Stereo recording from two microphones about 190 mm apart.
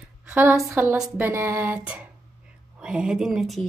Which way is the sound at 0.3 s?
10° right (ahead or behind).